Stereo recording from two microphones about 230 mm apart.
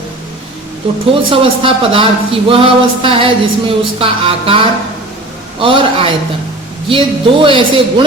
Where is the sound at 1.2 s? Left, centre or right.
Right.